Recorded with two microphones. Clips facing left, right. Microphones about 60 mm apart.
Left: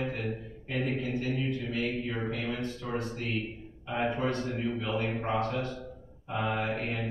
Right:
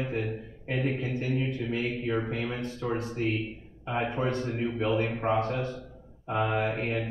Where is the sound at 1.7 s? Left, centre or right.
Right.